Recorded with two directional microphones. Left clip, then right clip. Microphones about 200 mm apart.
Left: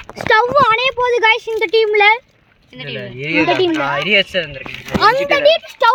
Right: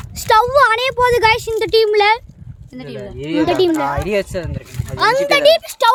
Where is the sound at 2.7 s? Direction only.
50° right (ahead or behind).